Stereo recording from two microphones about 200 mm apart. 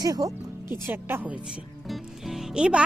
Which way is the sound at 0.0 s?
15° right (ahead or behind).